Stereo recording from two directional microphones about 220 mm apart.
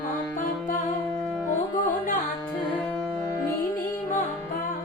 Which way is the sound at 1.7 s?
40° left (ahead or behind).